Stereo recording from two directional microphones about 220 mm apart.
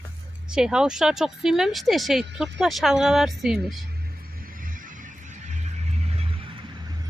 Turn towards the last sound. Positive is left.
turn(degrees=-20)  # may be behind; listen again after turning